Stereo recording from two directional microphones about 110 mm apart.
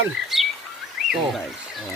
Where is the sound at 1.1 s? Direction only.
Centre (ahead or behind).